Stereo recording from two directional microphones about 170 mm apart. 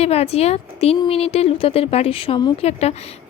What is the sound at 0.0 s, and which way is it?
A woman's voice, 35° left (ahead or behind).